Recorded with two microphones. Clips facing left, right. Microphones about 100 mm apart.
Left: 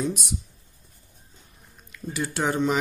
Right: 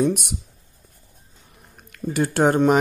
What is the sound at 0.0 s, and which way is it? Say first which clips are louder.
Speech: right 7 dB; 60° right (ahead or behind).